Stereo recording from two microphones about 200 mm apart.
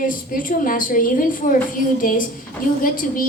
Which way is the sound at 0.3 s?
45° left (ahead or behind).